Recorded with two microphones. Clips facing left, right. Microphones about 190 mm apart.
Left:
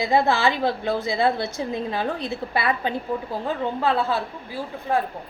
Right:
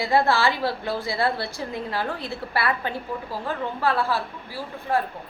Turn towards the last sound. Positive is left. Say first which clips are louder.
# left 1 dB
turn(degrees=20)  # may be behind; listen again after turning